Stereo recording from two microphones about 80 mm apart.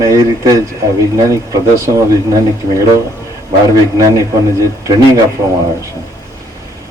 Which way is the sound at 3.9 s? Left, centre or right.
Right.